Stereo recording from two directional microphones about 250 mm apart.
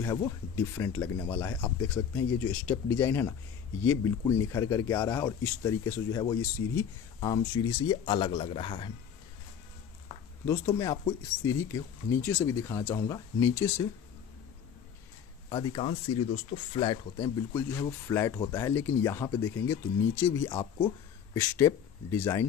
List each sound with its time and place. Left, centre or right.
0.0 s speech: centre
10.4 s speech: centre
15.5 s speech: centre